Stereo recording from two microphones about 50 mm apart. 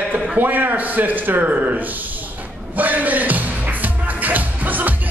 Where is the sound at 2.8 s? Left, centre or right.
Right.